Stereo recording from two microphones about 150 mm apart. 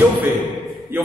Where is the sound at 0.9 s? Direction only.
15° right (ahead or behind).